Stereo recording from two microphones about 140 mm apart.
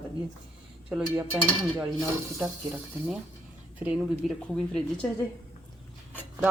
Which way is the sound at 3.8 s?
10° right (ahead or behind).